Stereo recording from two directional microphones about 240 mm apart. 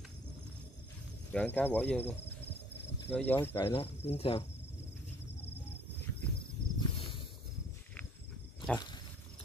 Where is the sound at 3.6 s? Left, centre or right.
Left.